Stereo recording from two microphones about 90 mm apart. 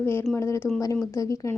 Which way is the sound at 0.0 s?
25° left (ahead or behind).